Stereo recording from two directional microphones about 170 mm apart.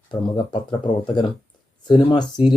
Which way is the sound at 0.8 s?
25° left (ahead or behind).